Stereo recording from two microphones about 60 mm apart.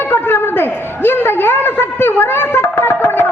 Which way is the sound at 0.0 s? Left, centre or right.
Left.